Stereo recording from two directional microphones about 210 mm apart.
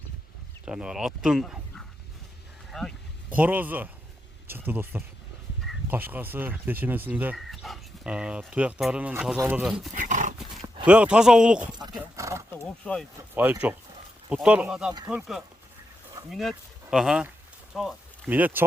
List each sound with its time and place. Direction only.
0.6 s speech: 5° right (ahead or behind)
9.9 s dog: 40° right (ahead or behind)
10.8 s speech: 5° right (ahead or behind)
11.8 s dog: 15° right (ahead or behind)
12.8 s speech: 5° left (ahead or behind)
13.3 s speech: 10° right (ahead or behind)